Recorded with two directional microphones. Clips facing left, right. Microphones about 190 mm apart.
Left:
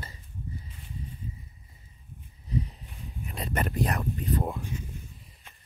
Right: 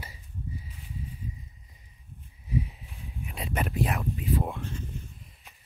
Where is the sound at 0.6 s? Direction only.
5° right (ahead or behind).